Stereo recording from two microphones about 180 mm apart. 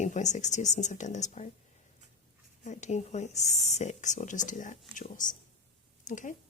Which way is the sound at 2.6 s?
40° left (ahead or behind).